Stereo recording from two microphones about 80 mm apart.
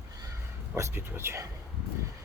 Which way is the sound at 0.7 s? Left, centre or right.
Right.